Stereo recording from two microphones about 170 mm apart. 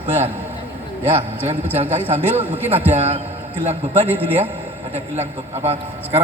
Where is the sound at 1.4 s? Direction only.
40° right (ahead or behind).